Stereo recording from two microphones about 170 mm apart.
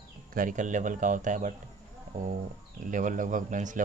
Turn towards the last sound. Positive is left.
turn(degrees=-45)  # may be behind; listen again after turning